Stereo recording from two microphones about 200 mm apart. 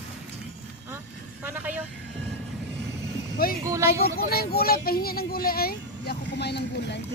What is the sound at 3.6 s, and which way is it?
Speech, 15° right (ahead or behind).